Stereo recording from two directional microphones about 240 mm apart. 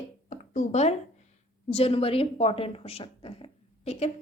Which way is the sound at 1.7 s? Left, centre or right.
Left.